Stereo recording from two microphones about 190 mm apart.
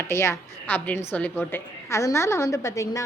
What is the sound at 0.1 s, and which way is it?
A woman's voice, 15° left (ahead or behind).